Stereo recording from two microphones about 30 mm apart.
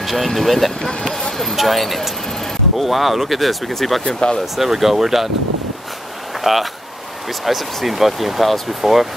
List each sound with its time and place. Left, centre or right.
0.0 s speech: centre
4.2 s speech: left
4.6 s speech: centre
6.4 s speech: centre